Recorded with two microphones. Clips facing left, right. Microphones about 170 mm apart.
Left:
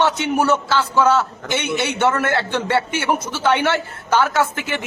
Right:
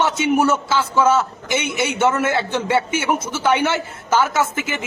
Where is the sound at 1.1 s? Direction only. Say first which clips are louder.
Even; 15° right (ahead or behind).